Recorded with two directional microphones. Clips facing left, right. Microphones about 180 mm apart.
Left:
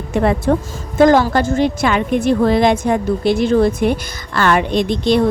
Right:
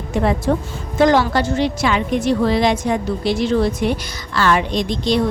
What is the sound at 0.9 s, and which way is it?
Speech, 50° left (ahead or behind).